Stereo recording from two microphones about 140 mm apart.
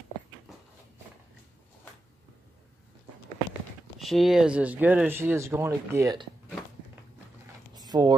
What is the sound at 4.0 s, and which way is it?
Speech, centre (ahead or behind).